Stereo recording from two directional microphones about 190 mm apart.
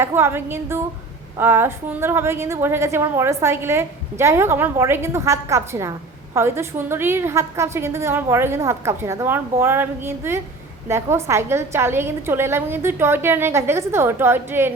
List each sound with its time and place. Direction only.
0.0 s a woman's voice: 15° right (ahead or behind)